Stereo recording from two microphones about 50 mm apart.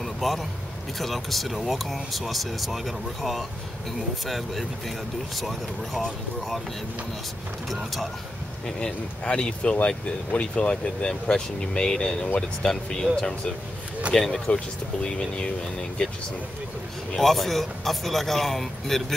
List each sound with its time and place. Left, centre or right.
0.0 s vehicle: centre
0.9 s speech: centre
7.7 s speech: centre
8.6 s speech: centre
17.1 s speech: centre